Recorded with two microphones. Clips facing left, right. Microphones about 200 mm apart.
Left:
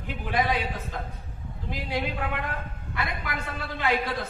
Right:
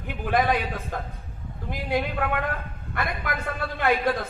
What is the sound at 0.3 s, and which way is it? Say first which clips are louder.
Speech: right 4 dB; 50° right (ahead or behind).